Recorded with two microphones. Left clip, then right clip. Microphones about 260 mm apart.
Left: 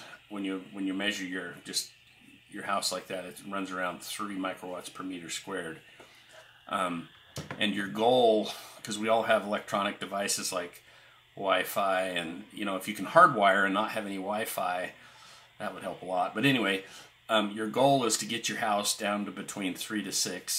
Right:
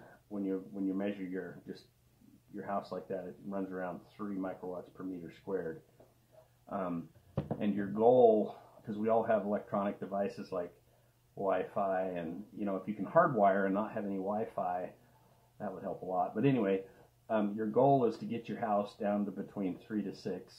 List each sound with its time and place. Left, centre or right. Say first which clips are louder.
0.3 s speech: left 1 dB; left
7.5 s speech: left 6 dB; left